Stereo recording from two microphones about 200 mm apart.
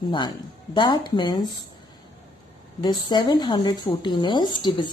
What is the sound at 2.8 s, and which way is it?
Speech, 20° left (ahead or behind).